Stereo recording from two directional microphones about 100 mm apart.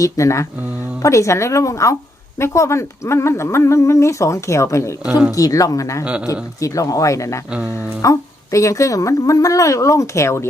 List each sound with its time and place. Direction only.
0.0 s a woman's voice: 30° left (ahead or behind)